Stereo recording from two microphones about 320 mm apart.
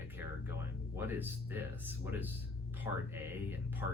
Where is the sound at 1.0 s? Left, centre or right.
Centre.